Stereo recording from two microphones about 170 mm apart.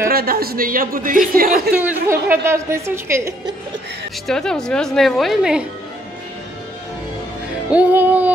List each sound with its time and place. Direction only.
0.1 s a man's voice: 65° right (ahead or behind)
1.7 s a woman's voice: 10° right (ahead or behind)
4.3 s a woman's voice: 5° left (ahead or behind)
7.7 s music: 10° right (ahead or behind)